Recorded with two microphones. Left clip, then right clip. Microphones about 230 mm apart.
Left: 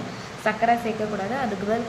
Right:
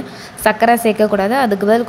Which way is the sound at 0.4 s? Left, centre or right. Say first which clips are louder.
Right 9 dB; right.